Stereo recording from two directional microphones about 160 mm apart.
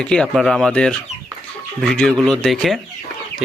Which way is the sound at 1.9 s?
5° left (ahead or behind).